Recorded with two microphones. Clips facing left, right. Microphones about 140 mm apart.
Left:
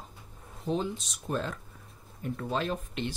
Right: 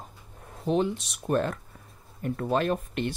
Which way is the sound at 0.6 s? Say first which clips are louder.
Right 5 dB; 70° right (ahead or behind).